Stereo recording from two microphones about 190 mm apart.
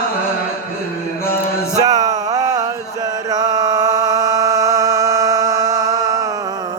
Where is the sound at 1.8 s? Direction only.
20° right (ahead or behind).